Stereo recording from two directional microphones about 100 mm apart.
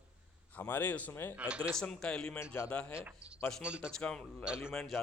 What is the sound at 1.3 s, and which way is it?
Speech, 10° right (ahead or behind).